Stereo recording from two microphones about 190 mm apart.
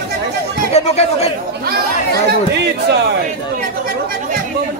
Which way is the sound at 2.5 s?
60° right (ahead or behind).